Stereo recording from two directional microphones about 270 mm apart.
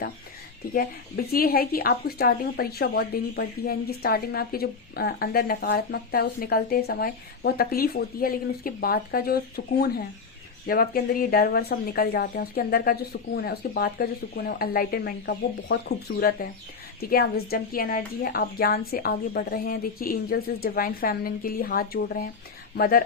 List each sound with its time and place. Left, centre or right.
0.7 s a woman's voice: left
10.7 s a woman's voice: left